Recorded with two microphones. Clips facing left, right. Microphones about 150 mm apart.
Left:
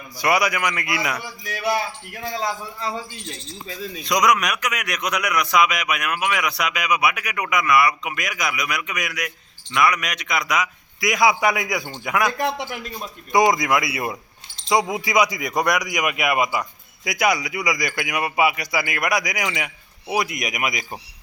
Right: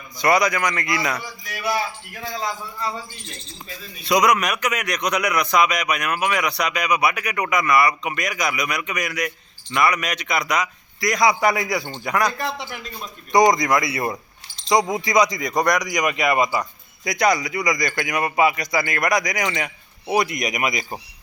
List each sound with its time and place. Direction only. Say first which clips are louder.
0.2 s a man's voice: right 2 dB; 10° left (ahead or behind)
4.0 s speech: right 2 dB; centre (ahead or behind)
12.4 s a man's voice: left 4 dB; 60° left (ahead or behind)
13.0 s speech: right 2 dB; 5° left (ahead or behind)